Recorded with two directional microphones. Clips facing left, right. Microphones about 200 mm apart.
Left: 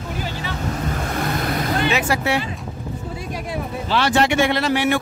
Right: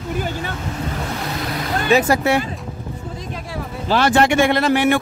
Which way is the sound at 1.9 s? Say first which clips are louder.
Right 10 dB; 40° right (ahead or behind).